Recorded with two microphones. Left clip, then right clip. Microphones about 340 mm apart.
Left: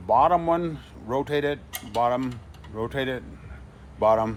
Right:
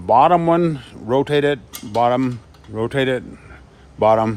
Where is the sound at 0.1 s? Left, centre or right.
Right.